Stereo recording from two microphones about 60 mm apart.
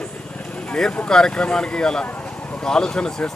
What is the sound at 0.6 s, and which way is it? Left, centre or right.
Speech, centre.